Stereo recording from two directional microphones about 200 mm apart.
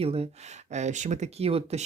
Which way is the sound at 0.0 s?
30° right (ahead or behind).